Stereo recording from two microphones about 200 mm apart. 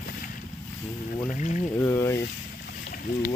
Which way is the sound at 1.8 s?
15° left (ahead or behind).